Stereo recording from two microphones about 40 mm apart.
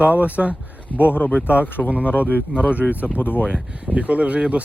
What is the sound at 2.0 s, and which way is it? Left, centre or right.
Speech, left.